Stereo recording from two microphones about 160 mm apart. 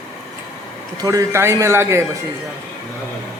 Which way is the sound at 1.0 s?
20° right (ahead or behind).